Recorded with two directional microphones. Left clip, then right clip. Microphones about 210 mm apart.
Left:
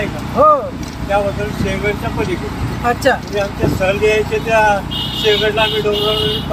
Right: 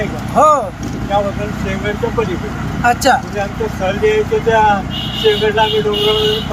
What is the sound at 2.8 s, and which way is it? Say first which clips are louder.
Speech: right 3 dB; 15° right (ahead or behind).